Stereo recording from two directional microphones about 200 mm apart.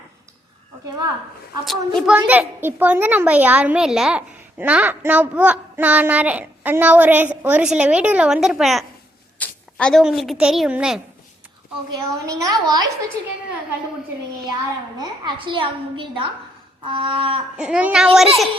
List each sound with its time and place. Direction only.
1.6 s a woman's voice: centre (ahead or behind)
11.9 s a woman's voice: 20° right (ahead or behind)
14.9 s a woman's voice: 25° right (ahead or behind)
17.6 s a woman's voice: 5° right (ahead or behind)